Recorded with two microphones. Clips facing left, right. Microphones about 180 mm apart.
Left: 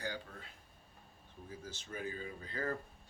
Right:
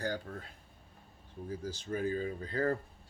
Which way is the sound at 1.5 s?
35° right (ahead or behind).